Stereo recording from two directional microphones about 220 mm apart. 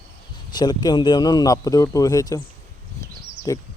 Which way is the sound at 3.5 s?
15° left (ahead or behind).